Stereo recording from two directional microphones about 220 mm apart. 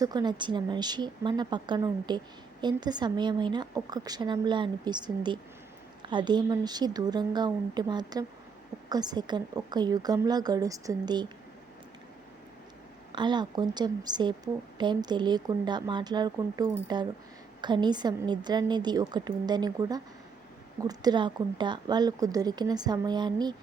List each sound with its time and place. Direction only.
0.0 s a woman's voice: 20° right (ahead or behind)
13.1 s speech: 20° right (ahead or behind)